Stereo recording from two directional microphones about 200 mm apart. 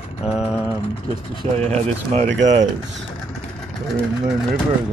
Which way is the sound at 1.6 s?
30° right (ahead or behind).